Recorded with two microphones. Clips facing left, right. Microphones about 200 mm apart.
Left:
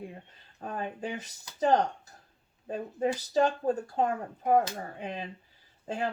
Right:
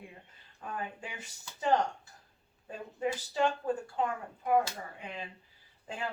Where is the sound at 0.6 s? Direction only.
40° left (ahead or behind).